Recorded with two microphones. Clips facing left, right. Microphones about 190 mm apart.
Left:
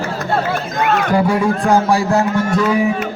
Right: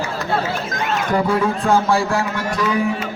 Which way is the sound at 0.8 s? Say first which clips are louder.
Left 7 dB; 60° left (ahead or behind).